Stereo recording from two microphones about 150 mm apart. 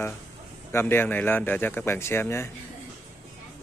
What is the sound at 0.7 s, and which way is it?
Speech, 15° left (ahead or behind).